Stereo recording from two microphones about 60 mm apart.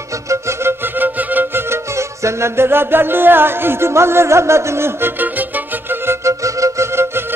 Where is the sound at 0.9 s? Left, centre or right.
Right.